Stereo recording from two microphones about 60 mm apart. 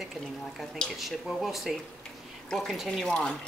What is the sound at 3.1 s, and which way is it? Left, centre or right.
Speech, centre.